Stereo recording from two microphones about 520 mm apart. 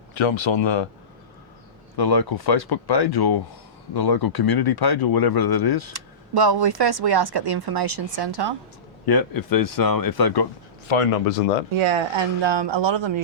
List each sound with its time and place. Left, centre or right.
0.1 s speech: left
2.0 s speech: left
5.9 s speech: right
9.0 s speech: left
10.8 s speech: left
11.7 s speech: right